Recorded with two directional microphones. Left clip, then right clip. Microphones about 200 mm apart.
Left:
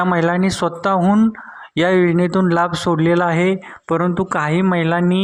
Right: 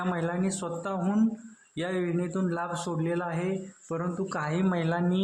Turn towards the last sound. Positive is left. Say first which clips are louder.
# left 12 dB
turn(degrees=30)  # may be behind; listen again after turning